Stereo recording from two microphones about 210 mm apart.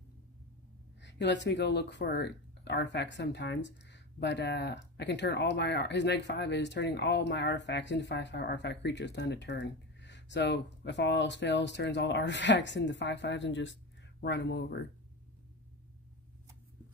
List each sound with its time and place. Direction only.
1.0 s speech: 55° left (ahead or behind)